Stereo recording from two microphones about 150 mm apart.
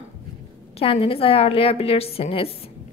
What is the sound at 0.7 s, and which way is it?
A woman's voice, 40° left (ahead or behind).